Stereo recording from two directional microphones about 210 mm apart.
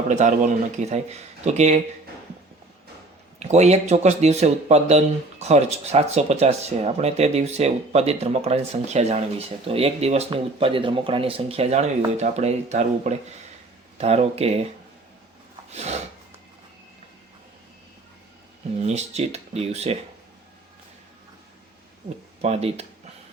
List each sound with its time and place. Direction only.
0.1 s speech: 35° right (ahead or behind)
3.4 s speech: 30° right (ahead or behind)
15.7 s a sound: 30° right (ahead or behind)
18.8 s speech: 30° right (ahead or behind)
22.4 s speech: 30° right (ahead or behind)